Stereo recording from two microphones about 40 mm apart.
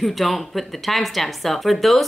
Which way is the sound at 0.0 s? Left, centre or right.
Centre.